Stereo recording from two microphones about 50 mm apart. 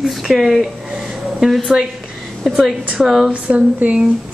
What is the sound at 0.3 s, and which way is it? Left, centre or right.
Speech, centre.